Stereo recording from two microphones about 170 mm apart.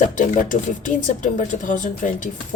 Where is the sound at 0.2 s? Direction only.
50° left (ahead or behind).